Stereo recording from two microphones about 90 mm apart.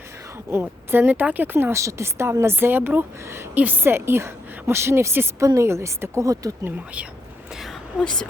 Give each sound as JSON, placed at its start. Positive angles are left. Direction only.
{"t": 0.9, "sound": "speech", "side_deg": -20}
{"t": 1.7, "sound": "speech", "side_deg": -35}
{"t": 6.7, "sound": "speech", "side_deg": -15}
{"t": 7.9, "sound": "speech", "side_deg": 10}